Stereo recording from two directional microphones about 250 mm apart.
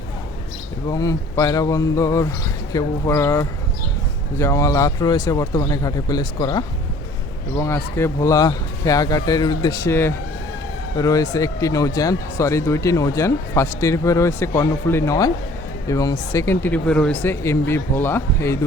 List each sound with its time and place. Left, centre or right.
0.9 s speech: centre